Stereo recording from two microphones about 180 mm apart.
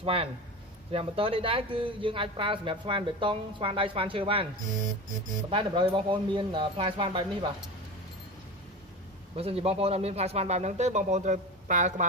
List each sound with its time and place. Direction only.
0.0 s a man's voice: 30° right (ahead or behind)
5.5 s speech: 30° right (ahead or behind)
9.4 s a man's voice: 35° right (ahead or behind)